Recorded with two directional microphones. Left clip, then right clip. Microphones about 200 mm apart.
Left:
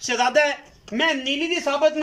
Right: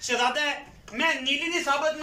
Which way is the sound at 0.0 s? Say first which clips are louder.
Left 6 dB; 40° left (ahead or behind).